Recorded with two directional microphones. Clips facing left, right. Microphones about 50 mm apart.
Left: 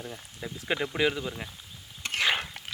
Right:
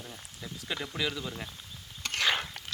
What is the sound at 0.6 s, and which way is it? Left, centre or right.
Speech, left.